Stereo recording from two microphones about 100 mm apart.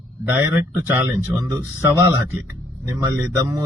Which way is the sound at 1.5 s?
30° right (ahead or behind).